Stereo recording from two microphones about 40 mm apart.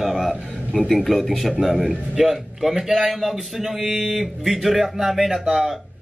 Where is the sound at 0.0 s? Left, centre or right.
Centre.